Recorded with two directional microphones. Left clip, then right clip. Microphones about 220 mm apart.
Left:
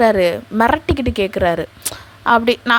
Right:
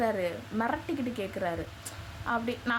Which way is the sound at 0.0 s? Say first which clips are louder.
Left 16 dB; 40° left (ahead or behind).